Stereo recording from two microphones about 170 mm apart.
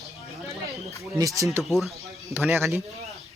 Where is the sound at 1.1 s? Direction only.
20° right (ahead or behind).